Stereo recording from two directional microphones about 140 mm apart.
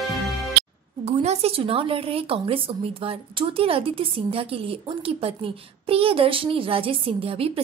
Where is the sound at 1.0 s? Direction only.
50° right (ahead or behind).